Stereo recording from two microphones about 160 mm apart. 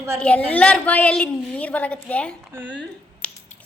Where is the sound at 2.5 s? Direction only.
10° right (ahead or behind).